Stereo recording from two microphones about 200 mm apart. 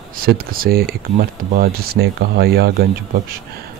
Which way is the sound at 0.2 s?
45° right (ahead or behind).